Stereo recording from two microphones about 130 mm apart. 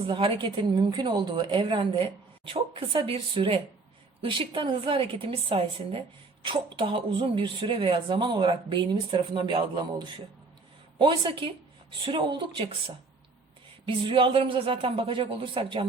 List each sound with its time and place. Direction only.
0.1 s a woman's voice: 40° right (ahead or behind)
13.8 s a woman's voice: 40° right (ahead or behind)